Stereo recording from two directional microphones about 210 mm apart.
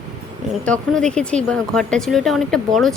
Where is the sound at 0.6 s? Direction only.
5° left (ahead or behind).